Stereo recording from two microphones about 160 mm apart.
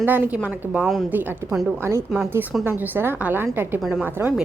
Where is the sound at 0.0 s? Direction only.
10° right (ahead or behind).